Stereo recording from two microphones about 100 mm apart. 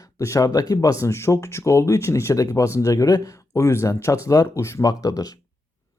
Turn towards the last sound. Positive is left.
turn(degrees=40)  # may be behind; listen again after turning